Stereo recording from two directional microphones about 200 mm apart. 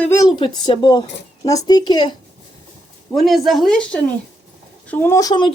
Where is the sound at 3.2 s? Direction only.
Centre (ahead or behind); by 5.5 s 20° left (ahead or behind).